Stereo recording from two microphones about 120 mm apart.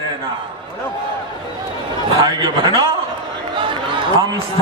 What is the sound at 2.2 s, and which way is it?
Speech, 30° right (ahead or behind).